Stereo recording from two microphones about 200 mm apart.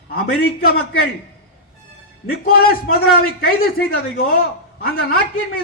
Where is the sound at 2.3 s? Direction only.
50° left (ahead or behind).